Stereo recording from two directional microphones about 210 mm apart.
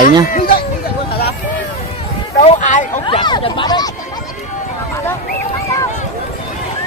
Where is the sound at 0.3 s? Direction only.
40° left (ahead or behind).